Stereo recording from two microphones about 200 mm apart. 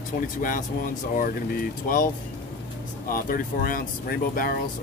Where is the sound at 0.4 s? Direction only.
45° left (ahead or behind).